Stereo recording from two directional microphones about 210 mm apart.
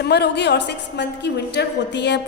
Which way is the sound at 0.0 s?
50° left (ahead or behind).